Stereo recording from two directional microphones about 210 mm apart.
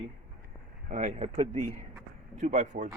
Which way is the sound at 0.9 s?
35° right (ahead or behind).